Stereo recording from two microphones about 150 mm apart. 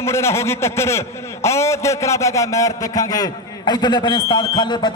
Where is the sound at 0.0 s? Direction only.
20° left (ahead or behind).